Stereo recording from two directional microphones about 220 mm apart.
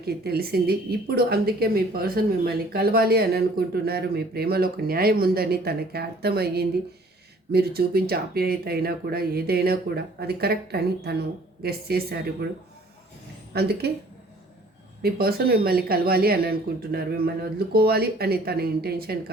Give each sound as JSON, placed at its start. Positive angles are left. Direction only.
{"t": 0.0, "sound": "speech", "side_deg": -45}
{"t": 13.5, "sound": "speech", "side_deg": -45}
{"t": 15.0, "sound": "speech", "side_deg": -45}